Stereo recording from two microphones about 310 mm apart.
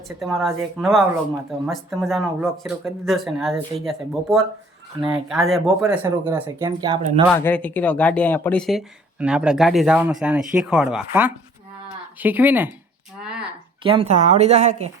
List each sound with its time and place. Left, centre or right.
0.2 s speech: centre
7.3 s speech: centre
13.1 s a sound: centre
13.8 s a woman's voice: centre